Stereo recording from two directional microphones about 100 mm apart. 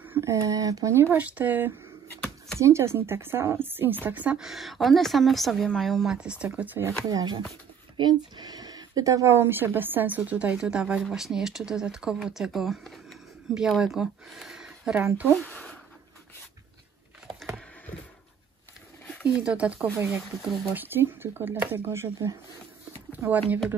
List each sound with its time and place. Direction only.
0.0 s a sound: 20° right (ahead or behind)
0.3 s speech: 35° right (ahead or behind)
1.1 s a woman's voice: 15° right (ahead or behind)
4.5 s a woman's voice: centre (ahead or behind)
6.2 s speech: 10° right (ahead or behind)
7.1 s speech: 35° right (ahead or behind); by 15.0 s 5° right (ahead or behind)
15.4 s a sound: 15° left (ahead or behind)
19.2 s a woman's voice: 10° right (ahead or behind); by 22.4 s 25° right (ahead or behind)
23.2 s speech: 15° right (ahead or behind)